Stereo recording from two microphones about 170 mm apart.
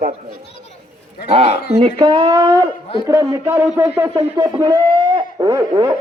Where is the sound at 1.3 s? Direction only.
35° right (ahead or behind); by 4.2 s 10° right (ahead or behind).